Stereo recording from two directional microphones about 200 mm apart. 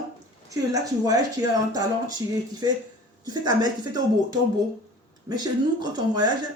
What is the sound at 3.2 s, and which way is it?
Speech, 20° right (ahead or behind).